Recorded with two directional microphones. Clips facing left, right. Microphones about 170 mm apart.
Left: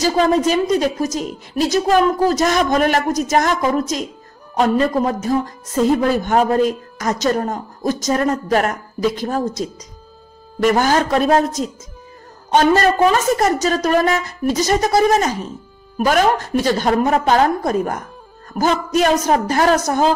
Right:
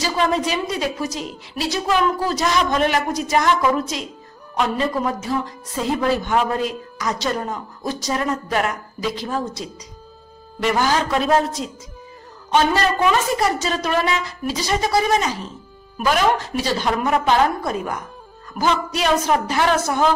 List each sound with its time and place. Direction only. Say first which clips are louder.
0.0 s speech: left 5 dB; 40° left (ahead or behind)